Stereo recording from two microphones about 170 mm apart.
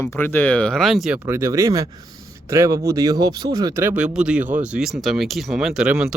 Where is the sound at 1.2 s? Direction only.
15° right (ahead or behind).